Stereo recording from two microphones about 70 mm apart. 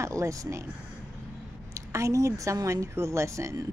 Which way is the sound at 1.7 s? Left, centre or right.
Right.